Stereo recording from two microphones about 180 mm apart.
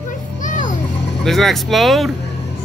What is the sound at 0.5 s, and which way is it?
Music, 45° left (ahead or behind).